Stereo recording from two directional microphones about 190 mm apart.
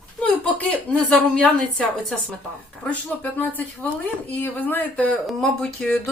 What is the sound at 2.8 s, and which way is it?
Speech, 5° left (ahead or behind).